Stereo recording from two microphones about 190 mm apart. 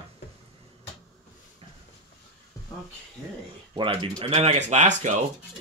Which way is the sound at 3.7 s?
25° right (ahead or behind).